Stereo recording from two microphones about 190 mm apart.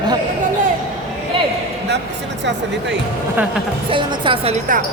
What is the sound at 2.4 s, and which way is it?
Speech, 70° right (ahead or behind).